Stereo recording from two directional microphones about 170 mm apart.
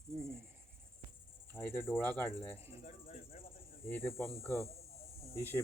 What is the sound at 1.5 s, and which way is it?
Cricket, 15° left (ahead or behind).